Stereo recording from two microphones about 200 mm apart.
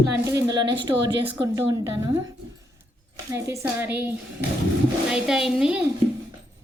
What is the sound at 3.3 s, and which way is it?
A woman's voice, 15° right (ahead or behind).